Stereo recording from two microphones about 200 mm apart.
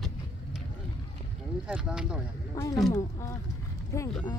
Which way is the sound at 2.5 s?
15° left (ahead or behind).